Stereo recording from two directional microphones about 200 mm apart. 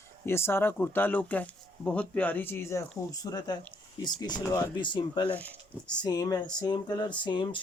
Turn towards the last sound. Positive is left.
turn(degrees=25)  # may be behind; listen again after turning